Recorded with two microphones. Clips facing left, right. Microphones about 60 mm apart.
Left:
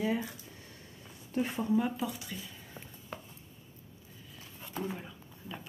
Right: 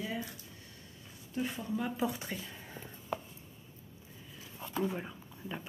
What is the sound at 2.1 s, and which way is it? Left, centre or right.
Speech, right.